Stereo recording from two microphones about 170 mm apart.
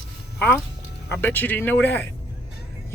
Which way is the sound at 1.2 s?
10° left (ahead or behind).